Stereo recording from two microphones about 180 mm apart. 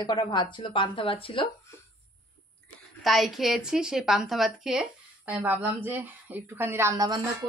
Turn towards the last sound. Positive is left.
turn(degrees=-20)  # may be behind; listen again after turning